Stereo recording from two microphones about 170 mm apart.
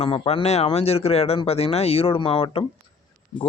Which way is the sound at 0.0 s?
35° left (ahead or behind).